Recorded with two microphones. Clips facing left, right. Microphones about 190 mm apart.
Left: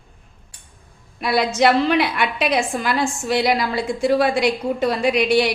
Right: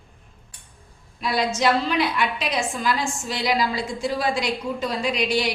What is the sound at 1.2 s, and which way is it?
A woman's voice, 65° left (ahead or behind).